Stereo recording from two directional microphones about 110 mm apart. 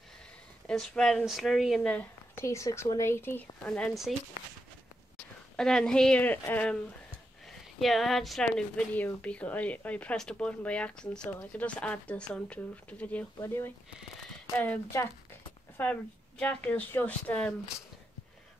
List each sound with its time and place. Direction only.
0.7 s speech: 5° left (ahead or behind)
1.8 s a sound: 15° left (ahead or behind)
2.4 s a woman's voice: 25° left (ahead or behind)
5.6 s speech: 5° left (ahead or behind)
13.4 s a woman's voice: 20° left (ahead or behind)